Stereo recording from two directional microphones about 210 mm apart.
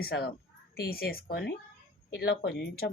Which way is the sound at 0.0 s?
50° left (ahead or behind).